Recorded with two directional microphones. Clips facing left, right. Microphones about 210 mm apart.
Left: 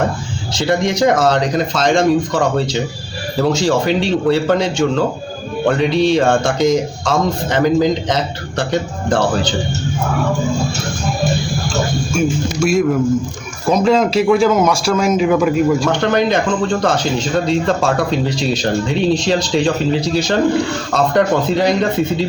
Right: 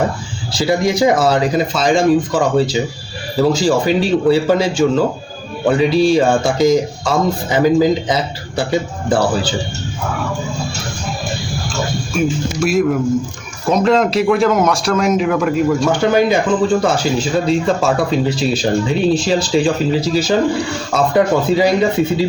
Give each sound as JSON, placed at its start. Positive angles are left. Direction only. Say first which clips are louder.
{"t": 0.5, "sound": "speech", "louder": "right 1 dB", "side_deg": -5}
{"t": 12.1, "sound": "speech", "louder": "even", "side_deg": 0}